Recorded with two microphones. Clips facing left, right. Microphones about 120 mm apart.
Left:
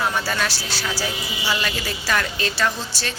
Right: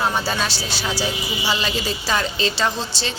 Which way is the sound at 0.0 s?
20° right (ahead or behind).